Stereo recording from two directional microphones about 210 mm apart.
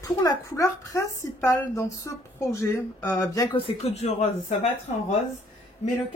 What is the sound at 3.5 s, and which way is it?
Speech, 30° left (ahead or behind).